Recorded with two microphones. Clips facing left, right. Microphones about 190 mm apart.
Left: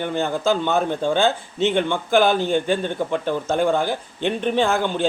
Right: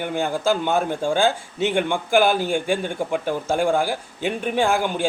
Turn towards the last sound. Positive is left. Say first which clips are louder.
# left 1 dB
turn(degrees=-10)  # may be behind; listen again after turning